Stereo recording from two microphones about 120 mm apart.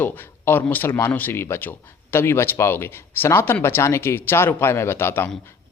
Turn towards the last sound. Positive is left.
turn(degrees=20)  # may be behind; listen again after turning